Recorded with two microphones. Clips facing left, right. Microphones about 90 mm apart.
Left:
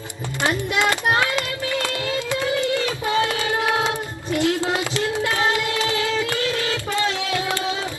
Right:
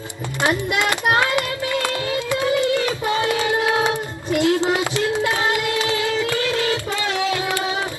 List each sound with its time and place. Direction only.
0.9 s child singing: 20° right (ahead or behind)
2.1 s a sound: 20° right (ahead or behind)
5.1 s child singing: 20° right (ahead or behind)